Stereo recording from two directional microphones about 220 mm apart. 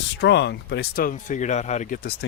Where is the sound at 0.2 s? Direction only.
50° left (ahead or behind); by 2.1 s 35° left (ahead or behind).